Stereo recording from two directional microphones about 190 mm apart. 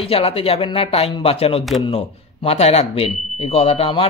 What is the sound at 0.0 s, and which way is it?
Speech, 30° left (ahead or behind).